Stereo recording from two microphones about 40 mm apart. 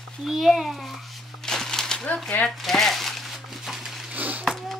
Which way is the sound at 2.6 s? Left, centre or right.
Centre.